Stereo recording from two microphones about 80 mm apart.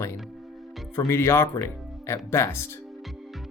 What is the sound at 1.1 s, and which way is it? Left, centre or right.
Speech, left.